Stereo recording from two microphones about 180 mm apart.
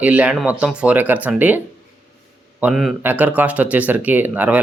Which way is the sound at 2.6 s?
Centre (ahead or behind).